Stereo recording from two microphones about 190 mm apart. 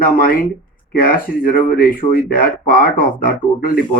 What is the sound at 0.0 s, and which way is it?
Speech, 50° left (ahead or behind).